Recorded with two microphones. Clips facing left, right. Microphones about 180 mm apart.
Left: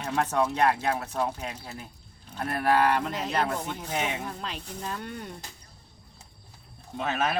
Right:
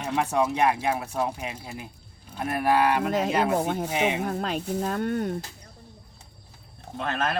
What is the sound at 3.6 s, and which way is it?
Speech, 55° right (ahead or behind).